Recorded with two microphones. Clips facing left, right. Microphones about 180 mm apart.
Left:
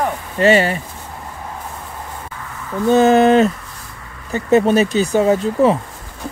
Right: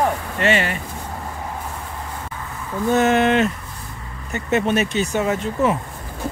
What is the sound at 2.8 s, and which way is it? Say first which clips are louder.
Speech: left 5 dB; 30° left (ahead or behind).